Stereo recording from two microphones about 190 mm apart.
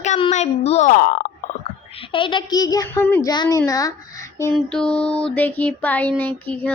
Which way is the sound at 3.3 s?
25° left (ahead or behind).